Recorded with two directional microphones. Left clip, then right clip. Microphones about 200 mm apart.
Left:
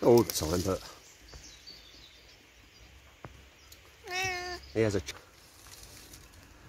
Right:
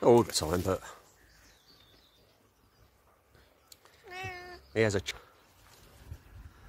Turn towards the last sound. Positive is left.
turn(degrees=-20)  # may be behind; listen again after turning